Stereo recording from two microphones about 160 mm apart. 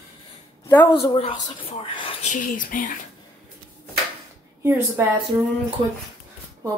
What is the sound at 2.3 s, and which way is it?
Speech, 55° left (ahead or behind).